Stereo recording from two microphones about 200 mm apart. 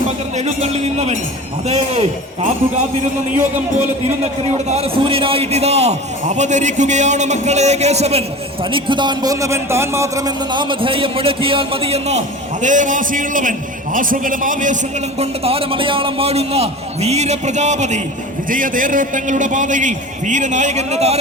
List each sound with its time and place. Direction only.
0.3 s a man's voice: 35° right (ahead or behind)
3.8 s a man's voice: 35° right (ahead or behind)
15.2 s a man's voice: 30° right (ahead or behind)